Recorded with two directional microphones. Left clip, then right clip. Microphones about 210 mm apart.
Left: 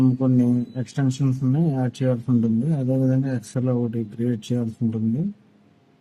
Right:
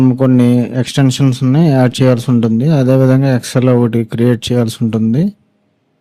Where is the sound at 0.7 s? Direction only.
55° right (ahead or behind).